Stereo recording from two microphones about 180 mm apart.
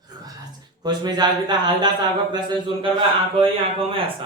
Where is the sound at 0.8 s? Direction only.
25° right (ahead or behind).